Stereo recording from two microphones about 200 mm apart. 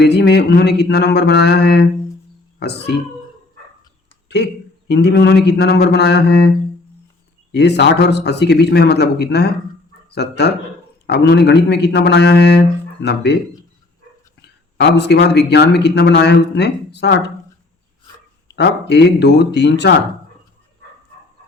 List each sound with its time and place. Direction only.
0.0 s speech: 55° left (ahead or behind)
4.9 s speech: 55° left (ahead or behind)
7.5 s speech: 60° left (ahead or behind)
14.4 s speech: 60° left (ahead or behind)
18.4 s speech: 60° left (ahead or behind)